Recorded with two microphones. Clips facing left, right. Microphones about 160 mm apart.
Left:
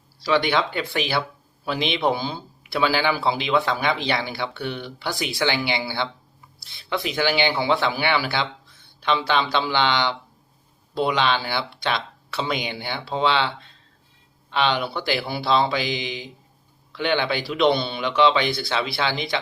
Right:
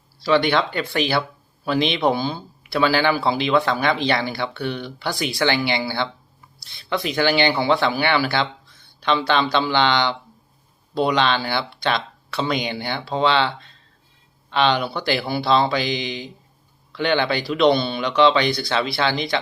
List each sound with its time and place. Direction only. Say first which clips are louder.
0.2 s speech: right 3 dB; 10° left (ahead or behind)
14.5 s speech: right 3 dB; 10° left (ahead or behind)